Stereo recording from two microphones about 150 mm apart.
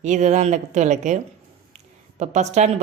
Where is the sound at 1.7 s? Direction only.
50° right (ahead or behind).